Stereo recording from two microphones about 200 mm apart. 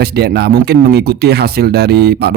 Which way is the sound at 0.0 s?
50° right (ahead or behind).